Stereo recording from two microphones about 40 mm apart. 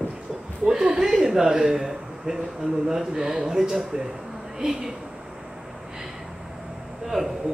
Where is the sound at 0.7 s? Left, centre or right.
Centre.